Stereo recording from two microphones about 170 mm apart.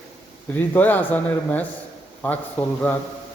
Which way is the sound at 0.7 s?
10° left (ahead or behind).